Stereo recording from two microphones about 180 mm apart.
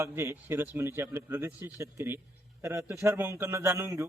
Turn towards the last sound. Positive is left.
turn(degrees=-15)  # may be behind; listen again after turning